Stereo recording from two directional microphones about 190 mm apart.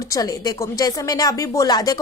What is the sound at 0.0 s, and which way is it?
A woman's voice, 20° left (ahead or behind).